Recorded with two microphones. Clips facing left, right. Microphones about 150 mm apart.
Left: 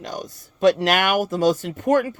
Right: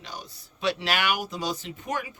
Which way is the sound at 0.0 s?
45° left (ahead or behind).